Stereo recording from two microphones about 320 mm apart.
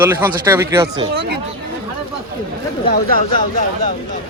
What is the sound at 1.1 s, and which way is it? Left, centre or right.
Speech, right.